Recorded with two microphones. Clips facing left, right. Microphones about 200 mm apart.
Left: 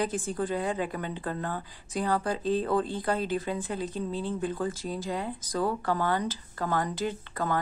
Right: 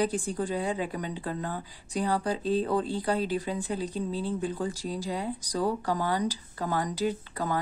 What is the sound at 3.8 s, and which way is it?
Speech, 35° right (ahead or behind).